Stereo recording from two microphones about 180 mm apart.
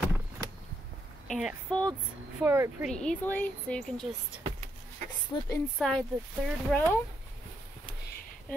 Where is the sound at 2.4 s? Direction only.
10° right (ahead or behind).